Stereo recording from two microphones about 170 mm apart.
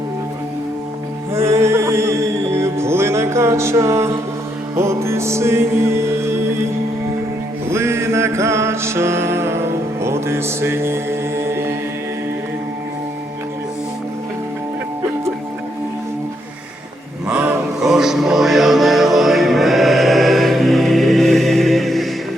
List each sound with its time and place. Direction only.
1.3 s music: 15° right (ahead or behind)
7.7 s music: 15° right (ahead or behind)
11.4 s mantra: 15° right (ahead or behind)
17.2 s music: 10° right (ahead or behind)